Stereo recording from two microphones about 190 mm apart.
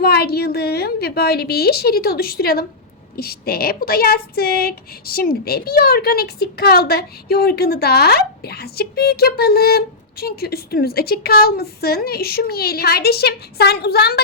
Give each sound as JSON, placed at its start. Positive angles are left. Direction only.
{"t": 0.0, "sound": "speech", "side_deg": 55}